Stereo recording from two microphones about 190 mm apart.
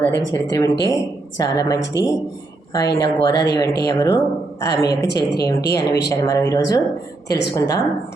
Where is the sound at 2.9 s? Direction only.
15° left (ahead or behind).